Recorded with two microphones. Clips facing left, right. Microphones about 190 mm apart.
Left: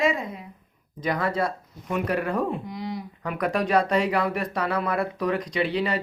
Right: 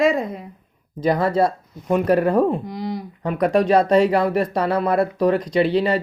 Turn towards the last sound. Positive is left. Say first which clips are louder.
# right 7 dB
turn(degrees=-30)  # may be behind; listen again after turning